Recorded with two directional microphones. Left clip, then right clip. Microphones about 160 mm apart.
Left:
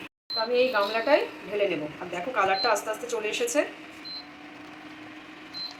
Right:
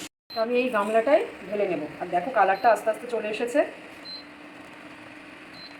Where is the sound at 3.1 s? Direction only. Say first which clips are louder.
Right 1 dB; 45° right (ahead or behind).